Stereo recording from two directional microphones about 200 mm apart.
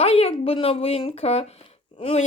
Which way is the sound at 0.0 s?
30° left (ahead or behind).